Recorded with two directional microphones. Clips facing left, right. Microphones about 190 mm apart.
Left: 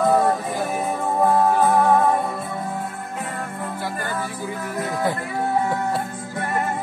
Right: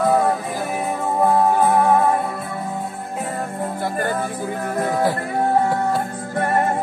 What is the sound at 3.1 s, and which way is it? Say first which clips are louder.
Music: right 6 dB; 35° right (ahead or behind).